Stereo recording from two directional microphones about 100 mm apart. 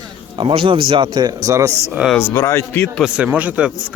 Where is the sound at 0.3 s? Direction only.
60° right (ahead or behind); by 1.7 s 35° right (ahead or behind).